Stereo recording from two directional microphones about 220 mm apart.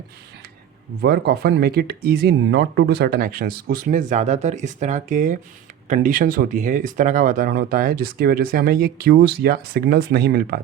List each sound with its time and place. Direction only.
1.0 s speech: 45° right (ahead or behind)